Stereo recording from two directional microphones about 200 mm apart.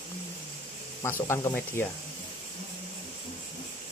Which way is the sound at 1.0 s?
10° left (ahead or behind).